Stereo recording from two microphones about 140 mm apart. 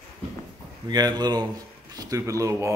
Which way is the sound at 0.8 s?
30° right (ahead or behind).